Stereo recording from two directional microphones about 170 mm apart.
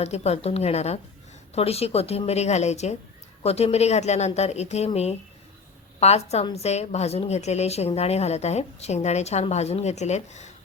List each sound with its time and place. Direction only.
0.0 s a woman's voice: 40° left (ahead or behind)
6.0 s a woman's voice: 40° left (ahead or behind)